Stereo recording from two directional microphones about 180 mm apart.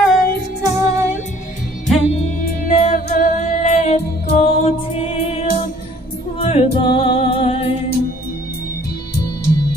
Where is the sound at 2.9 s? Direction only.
45° left (ahead or behind).